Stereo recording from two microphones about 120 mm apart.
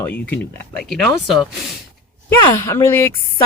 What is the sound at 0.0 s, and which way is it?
Speech, 15° left (ahead or behind).